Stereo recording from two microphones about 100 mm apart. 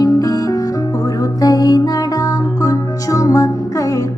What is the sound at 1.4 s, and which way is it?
Music, 35° left (ahead or behind).